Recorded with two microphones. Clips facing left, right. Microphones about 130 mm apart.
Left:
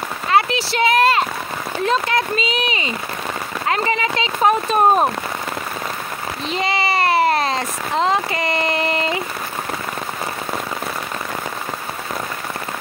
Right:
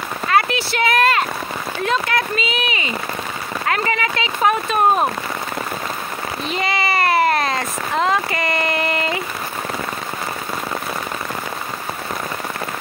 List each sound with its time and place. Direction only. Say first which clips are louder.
0.3 s a sound: left 1 dB; 25° left (ahead or behind)
1.9 s speech: left 1 dB; 30° left (ahead or behind)
6.5 s speech: left 1 dB; 30° left (ahead or behind)